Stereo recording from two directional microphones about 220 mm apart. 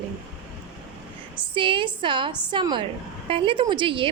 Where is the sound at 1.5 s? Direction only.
25° right (ahead or behind).